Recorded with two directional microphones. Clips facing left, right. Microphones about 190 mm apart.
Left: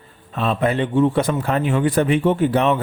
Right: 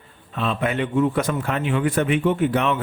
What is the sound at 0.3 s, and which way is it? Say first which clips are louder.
A man's voice: left 4 dB; 40° left (ahead or behind).